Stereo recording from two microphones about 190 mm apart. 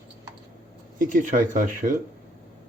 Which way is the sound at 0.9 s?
45° right (ahead or behind).